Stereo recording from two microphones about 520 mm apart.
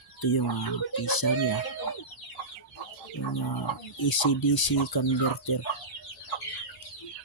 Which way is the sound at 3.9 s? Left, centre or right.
Left.